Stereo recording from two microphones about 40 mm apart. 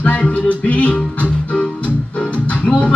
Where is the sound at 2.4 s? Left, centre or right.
Left.